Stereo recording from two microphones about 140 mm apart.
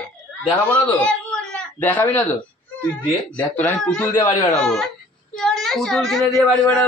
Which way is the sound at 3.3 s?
10° left (ahead or behind).